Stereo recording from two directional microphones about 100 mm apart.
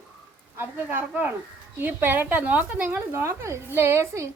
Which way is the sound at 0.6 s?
20° right (ahead or behind).